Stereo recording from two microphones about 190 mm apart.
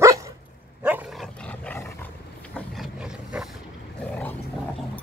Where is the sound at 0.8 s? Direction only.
5° right (ahead or behind).